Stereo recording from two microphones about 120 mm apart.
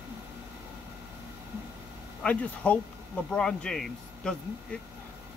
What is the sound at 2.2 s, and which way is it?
Speech, 10° left (ahead or behind).